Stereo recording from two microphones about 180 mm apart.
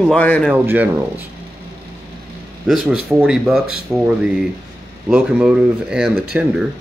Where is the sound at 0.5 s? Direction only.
10° right (ahead or behind).